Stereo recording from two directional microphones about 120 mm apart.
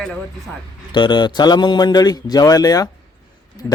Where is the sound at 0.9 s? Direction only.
40° left (ahead or behind).